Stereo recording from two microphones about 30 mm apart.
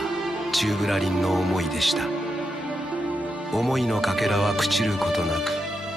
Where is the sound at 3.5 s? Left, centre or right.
Centre.